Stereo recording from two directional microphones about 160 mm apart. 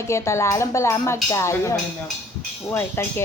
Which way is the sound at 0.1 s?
15° left (ahead or behind).